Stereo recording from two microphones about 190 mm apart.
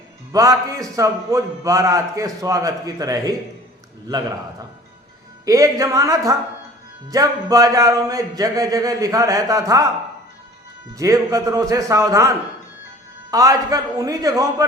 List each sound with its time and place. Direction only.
0.3 s a man's voice: 15° right (ahead or behind)
5.5 s a man's voice: 15° right (ahead or behind)
10.9 s a man's voice: 15° right (ahead or behind)
13.3 s a man's voice: 20° right (ahead or behind)